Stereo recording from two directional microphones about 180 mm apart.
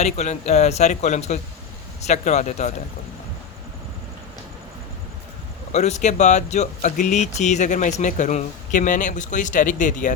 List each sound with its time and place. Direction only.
0.0 s speech: 40° left (ahead or behind)
5.7 s speech: 40° left (ahead or behind)